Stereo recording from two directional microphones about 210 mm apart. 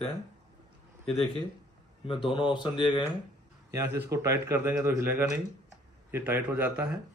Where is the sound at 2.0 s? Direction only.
25° left (ahead or behind).